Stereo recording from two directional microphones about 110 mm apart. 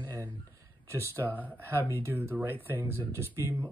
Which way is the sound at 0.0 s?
30° right (ahead or behind).